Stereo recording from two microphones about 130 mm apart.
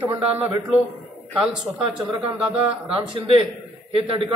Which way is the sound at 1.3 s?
5° right (ahead or behind).